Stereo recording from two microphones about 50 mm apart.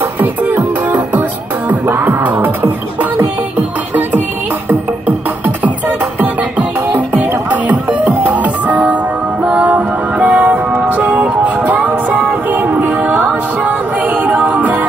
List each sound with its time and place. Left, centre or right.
0.2 s music: right
4.6 s music: right
6.9 s music: right